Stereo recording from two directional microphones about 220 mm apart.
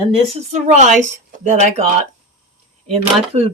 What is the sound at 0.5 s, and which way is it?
Speech, 30° right (ahead or behind).